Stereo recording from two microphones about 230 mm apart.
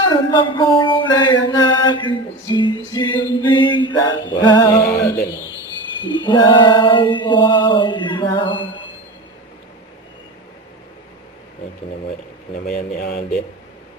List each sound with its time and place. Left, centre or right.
0.1 s mantra: left
6.1 s mantra: centre
12.6 s speech: left